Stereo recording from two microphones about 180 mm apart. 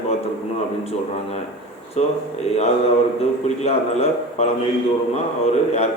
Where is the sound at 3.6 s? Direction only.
35° left (ahead or behind).